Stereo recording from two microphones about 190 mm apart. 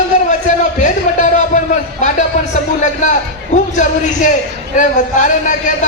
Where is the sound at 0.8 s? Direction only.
40° left (ahead or behind).